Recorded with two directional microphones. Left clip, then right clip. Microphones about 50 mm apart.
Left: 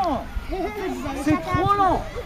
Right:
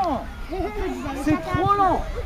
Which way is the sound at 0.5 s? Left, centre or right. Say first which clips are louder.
Left 1 dB; left.